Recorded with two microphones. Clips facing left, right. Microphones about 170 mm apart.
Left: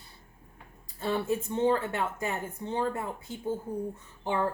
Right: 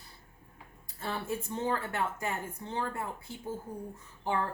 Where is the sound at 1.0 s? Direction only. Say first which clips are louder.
Left 6 dB; 25° left (ahead or behind).